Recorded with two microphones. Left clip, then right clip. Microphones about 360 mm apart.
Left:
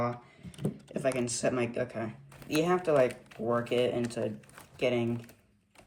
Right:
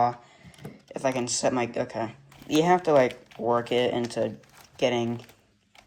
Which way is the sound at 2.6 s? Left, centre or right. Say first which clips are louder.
Right 6 dB; right.